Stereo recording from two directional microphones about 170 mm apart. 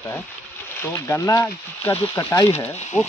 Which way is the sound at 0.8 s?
15° left (ahead or behind).